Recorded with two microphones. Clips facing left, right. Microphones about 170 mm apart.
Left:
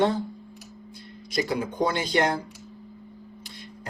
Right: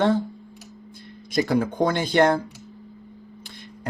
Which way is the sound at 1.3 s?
55° right (ahead or behind).